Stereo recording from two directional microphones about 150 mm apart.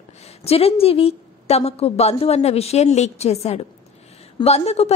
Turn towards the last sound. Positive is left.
turn(degrees=45)  # may be behind; listen again after turning